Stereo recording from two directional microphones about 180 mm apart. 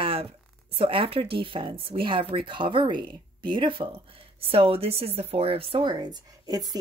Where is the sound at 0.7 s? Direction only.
30° right (ahead or behind).